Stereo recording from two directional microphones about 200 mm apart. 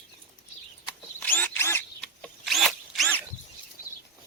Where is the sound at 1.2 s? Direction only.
10° left (ahead or behind).